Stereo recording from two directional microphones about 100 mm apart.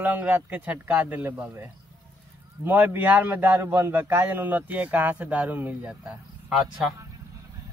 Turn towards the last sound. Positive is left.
turn(degrees=-10)  # may be behind; listen again after turning